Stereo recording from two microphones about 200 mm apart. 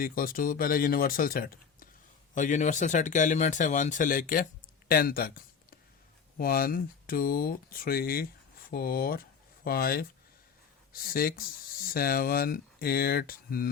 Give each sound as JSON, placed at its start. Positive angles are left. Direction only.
{"t": 0.0, "sound": "speech", "side_deg": 45}
{"t": 4.9, "sound": "a sound", "side_deg": 50}
{"t": 6.3, "sound": "speech", "side_deg": 45}